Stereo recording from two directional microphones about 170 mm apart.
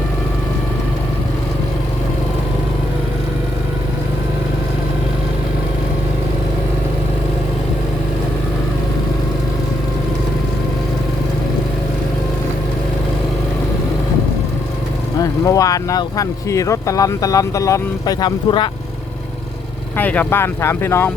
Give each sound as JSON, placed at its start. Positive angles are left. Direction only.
{"t": 15.2, "sound": "speech", "side_deg": 20}
{"t": 20.0, "sound": "speech", "side_deg": 10}